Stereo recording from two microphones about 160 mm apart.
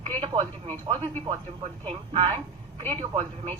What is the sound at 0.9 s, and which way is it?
A woman's voice, 35° right (ahead or behind).